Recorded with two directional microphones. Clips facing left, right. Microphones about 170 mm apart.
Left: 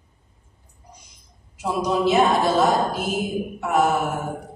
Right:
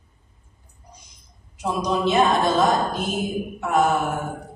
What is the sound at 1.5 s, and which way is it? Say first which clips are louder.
A woman's voice: left 1 dB; 5° left (ahead or behind).